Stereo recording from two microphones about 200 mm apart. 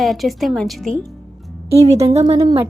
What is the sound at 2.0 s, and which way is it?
Speech, 30° right (ahead or behind).